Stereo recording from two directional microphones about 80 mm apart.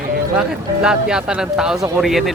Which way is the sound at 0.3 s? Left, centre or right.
Centre.